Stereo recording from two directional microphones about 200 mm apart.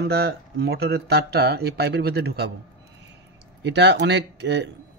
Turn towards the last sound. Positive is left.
turn(degrees=-60)  # may be behind; listen again after turning